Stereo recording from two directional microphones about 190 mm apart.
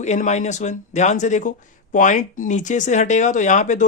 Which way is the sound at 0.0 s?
40° left (ahead or behind).